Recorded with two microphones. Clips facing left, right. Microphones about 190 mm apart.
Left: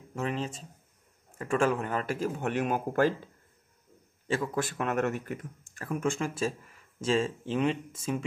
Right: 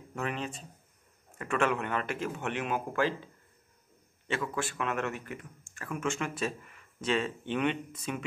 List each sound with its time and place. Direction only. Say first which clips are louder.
0.1 s speech: left 3 dB; 30° left (ahead or behind); by 3.3 s 45° left (ahead or behind)
4.3 s speech: left 3 dB; 35° left (ahead or behind)